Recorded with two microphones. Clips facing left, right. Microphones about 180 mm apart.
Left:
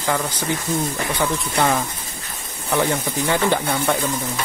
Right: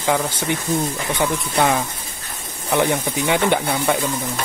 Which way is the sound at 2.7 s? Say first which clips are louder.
Right 2 dB; 20° right (ahead or behind).